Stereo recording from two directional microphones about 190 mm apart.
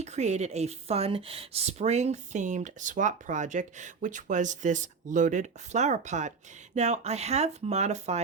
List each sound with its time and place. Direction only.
0.0 s speech: 35° right (ahead or behind)